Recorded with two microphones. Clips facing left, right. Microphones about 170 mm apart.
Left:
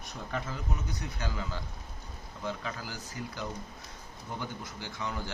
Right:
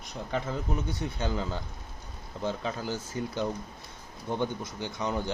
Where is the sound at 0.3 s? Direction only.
25° right (ahead or behind).